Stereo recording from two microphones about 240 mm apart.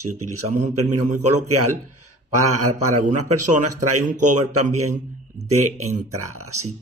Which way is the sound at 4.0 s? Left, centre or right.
Right.